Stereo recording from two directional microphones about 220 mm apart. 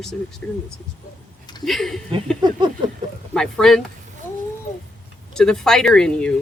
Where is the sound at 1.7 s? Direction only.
Centre (ahead or behind).